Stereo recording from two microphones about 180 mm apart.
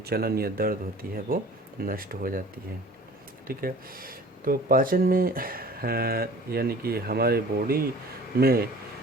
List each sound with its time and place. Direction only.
0.0 s speech: 60° right (ahead or behind)
3.4 s speech: 55° right (ahead or behind)